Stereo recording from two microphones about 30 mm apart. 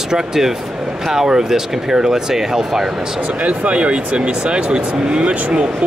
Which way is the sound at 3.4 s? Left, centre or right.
Right.